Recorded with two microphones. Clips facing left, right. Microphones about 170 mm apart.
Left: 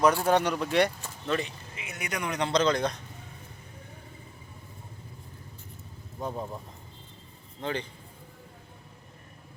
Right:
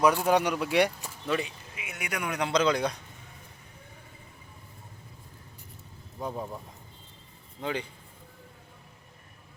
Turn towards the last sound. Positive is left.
turn(degrees=-10)  # may be behind; listen again after turning